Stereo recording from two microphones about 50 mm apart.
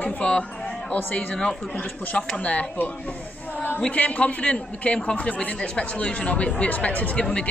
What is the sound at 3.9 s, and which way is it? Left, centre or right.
Speech, left.